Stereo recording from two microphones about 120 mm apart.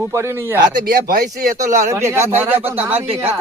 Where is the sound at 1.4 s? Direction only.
90° right.